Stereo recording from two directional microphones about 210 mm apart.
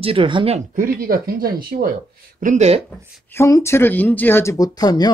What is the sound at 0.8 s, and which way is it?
Speech, 45° right (ahead or behind).